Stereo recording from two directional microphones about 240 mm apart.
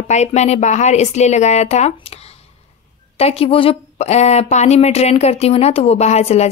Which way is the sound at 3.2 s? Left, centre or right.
Left.